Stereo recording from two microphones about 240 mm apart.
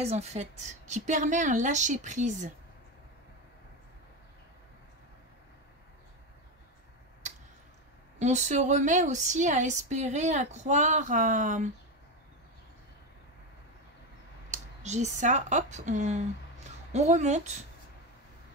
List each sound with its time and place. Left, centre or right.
0.0 s a woman's voice: right
8.2 s a woman's voice: right
14.5 s speech: right